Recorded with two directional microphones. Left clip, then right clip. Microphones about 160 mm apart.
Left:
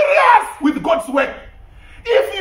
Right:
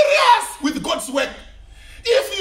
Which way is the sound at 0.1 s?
25° right (ahead or behind).